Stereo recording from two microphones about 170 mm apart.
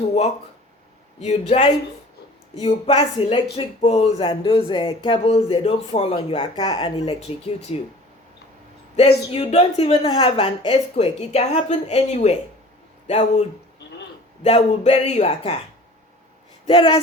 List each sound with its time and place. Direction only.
1.2 s speech: 40° left (ahead or behind)
9.0 s speech: 35° left (ahead or behind)
14.4 s speech: 40° left (ahead or behind)
16.6 s speech: 30° left (ahead or behind)